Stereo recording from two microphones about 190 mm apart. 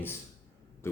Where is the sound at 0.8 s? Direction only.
15° left (ahead or behind).